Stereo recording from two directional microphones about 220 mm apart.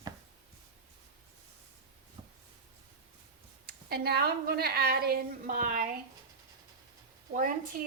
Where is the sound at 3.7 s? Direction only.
45° right (ahead or behind).